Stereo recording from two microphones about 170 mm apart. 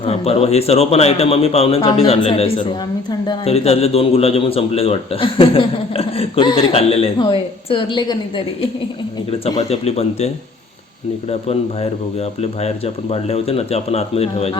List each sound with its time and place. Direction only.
0.0 s a man's voice: 35° left (ahead or behind)
9.6 s a man's voice: 40° left (ahead or behind)